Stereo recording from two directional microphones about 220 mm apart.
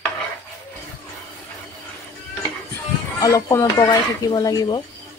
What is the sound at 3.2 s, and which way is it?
Speech, 15° left (ahead or behind).